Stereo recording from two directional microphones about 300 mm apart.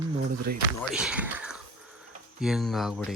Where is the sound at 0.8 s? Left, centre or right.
Centre.